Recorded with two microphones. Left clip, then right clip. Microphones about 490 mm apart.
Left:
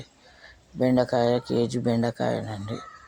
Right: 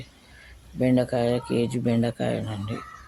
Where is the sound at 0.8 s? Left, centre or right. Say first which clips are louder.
Left 1 dB; right.